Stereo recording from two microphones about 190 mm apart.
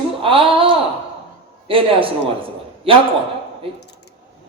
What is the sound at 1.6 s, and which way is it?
Speech, 30° right (ahead or behind).